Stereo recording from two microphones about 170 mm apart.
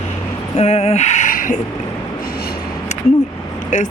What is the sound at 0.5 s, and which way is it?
Speech, 40° left (ahead or behind).